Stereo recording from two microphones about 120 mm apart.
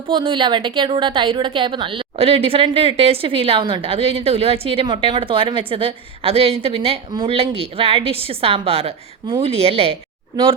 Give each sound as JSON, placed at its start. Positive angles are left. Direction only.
{"t": 0.1, "sound": "a woman's voice", "side_deg": -45}